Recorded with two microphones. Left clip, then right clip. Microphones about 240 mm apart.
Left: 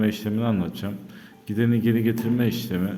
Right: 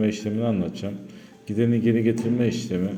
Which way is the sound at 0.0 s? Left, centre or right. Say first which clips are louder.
Right 1 dB; centre.